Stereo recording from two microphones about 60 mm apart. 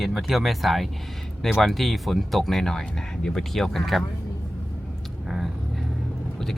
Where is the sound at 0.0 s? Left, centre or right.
Centre.